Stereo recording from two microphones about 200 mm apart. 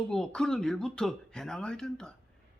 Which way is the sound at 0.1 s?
Centre (ahead or behind).